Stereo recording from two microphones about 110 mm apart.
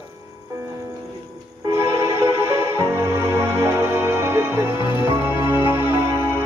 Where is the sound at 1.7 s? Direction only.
25° right (ahead or behind).